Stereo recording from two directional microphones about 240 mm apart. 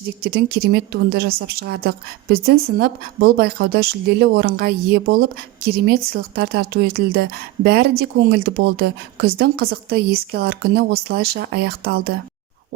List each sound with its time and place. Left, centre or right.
0.2 s speech: right